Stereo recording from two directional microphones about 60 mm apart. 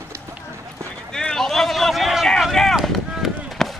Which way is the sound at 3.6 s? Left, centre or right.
Centre.